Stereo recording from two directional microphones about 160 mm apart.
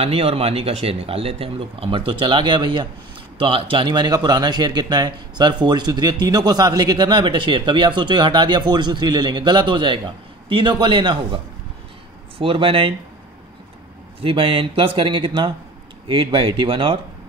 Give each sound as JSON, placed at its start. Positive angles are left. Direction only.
{"t": 0.0, "sound": "speech", "side_deg": -40}
{"t": 14.2, "sound": "speech", "side_deg": -35}